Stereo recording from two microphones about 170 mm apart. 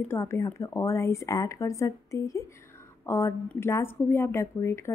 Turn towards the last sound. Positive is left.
turn(degrees=15)  # may be behind; listen again after turning